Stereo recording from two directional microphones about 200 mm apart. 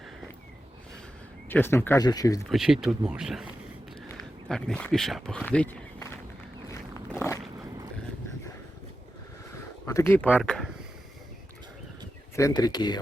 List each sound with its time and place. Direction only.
1.5 s speech: 10° left (ahead or behind)
2.5 s speech: centre (ahead or behind)
4.4 s speech: 5° left (ahead or behind)
6.7 s a sound: 10° left (ahead or behind)
9.8 s speech: 15° left (ahead or behind)
12.4 s speech: 15° left (ahead or behind)